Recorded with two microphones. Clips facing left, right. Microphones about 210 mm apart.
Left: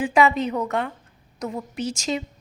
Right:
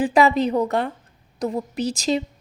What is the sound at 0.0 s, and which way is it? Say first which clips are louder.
A woman's voice: right 2 dB; 35° right (ahead or behind).